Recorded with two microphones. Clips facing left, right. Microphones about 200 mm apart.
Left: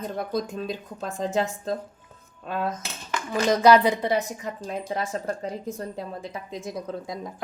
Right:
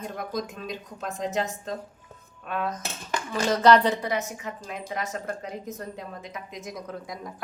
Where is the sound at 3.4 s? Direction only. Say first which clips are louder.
Left 2 dB; 10° left (ahead or behind).